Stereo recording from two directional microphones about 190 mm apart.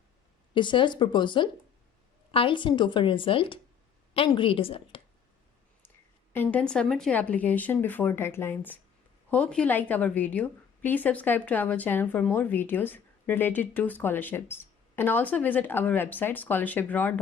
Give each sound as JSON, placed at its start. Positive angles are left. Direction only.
{"t": 0.5, "sound": "a woman's voice", "side_deg": 25}
{"t": 6.3, "sound": "a woman's voice", "side_deg": 10}